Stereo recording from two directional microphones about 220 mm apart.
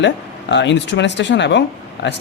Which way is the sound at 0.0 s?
55° left (ahead or behind).